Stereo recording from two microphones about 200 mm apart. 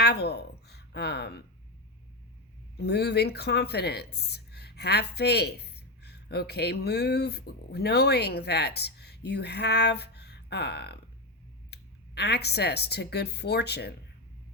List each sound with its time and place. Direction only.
0.0 s a woman's voice: 55° left (ahead or behind)
2.7 s speech: 55° left (ahead or behind)